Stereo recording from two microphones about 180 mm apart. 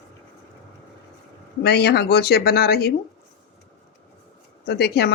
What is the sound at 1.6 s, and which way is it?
Speech, 65° left (ahead or behind).